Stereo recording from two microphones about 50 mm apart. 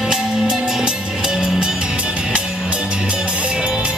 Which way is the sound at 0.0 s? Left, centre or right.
Centre.